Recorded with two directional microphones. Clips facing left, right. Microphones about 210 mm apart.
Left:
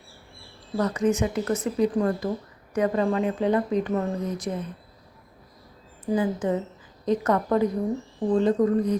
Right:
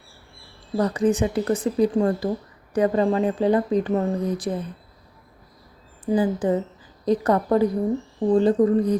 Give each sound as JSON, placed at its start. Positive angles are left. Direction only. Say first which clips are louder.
{"t": 0.8, "sound": "speech", "louder": "right 3 dB", "side_deg": -35}
{"t": 6.1, "sound": "speech", "louder": "right 3 dB", "side_deg": -30}